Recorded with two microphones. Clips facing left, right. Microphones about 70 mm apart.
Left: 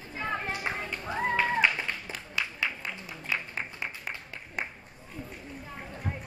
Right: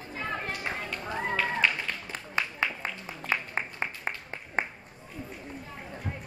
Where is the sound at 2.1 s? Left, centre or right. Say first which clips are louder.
Right 2 dB; right.